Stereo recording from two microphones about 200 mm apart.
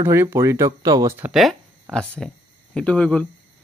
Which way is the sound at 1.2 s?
Centre (ahead or behind).